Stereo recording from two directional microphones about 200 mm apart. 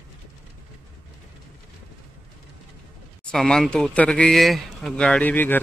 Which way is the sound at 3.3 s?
5° left (ahead or behind).